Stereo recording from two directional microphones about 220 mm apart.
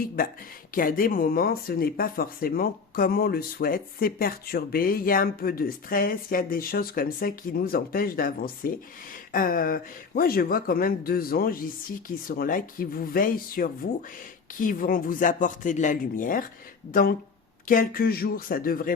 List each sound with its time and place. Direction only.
0.2 s speech: 40° left (ahead or behind)